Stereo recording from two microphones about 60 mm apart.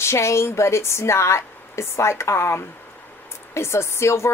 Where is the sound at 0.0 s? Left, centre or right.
Left.